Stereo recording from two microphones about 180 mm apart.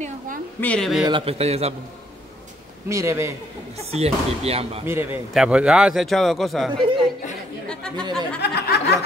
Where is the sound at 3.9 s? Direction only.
35° right (ahead or behind).